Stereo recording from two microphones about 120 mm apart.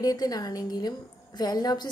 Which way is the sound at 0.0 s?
30° left (ahead or behind).